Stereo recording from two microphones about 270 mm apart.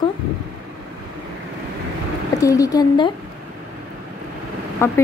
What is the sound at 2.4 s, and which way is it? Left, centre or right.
Speech, centre.